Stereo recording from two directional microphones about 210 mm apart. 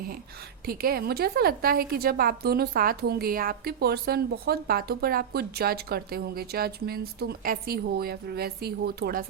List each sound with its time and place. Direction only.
0.6 s a woman's voice: 45° right (ahead or behind)